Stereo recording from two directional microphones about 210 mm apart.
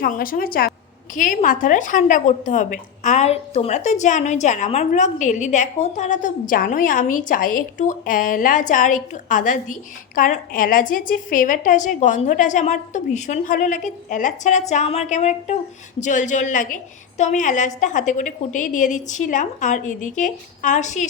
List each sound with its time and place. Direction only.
0.0 s a woman's voice: 40° left (ahead or behind)